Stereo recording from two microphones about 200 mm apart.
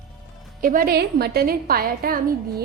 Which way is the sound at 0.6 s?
45° right (ahead or behind).